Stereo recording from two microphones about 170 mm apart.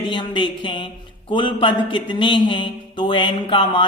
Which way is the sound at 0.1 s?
30° left (ahead or behind).